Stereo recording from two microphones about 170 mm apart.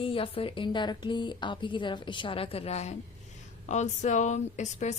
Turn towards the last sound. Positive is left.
turn(degrees=45)  # may be behind; listen again after turning